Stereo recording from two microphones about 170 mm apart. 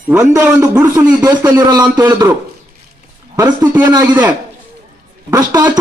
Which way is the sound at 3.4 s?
15° right (ahead or behind).